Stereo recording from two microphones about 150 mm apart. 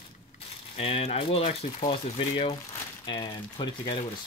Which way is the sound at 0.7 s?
40° left (ahead or behind).